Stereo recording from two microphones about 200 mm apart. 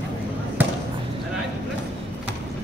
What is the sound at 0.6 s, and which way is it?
Basketball bounce, 10° right (ahead or behind).